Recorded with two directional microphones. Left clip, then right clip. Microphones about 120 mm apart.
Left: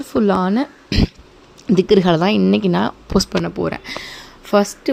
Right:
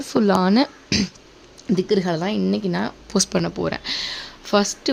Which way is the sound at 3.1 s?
5° left (ahead or behind).